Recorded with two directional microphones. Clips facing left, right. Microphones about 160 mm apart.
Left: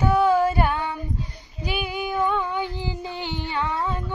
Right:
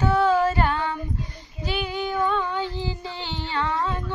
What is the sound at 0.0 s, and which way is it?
Female singing, 15° left (ahead or behind).